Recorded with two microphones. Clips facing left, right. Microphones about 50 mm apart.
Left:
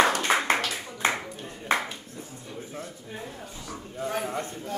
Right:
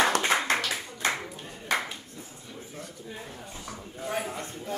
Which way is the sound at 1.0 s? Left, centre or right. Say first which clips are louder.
Left 3 dB; left.